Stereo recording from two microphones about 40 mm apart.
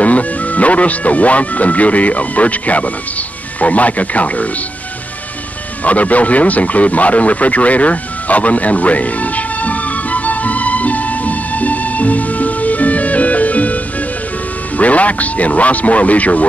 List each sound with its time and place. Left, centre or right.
0.0 s speech: left
5.9 s radio: left
14.8 s speech: left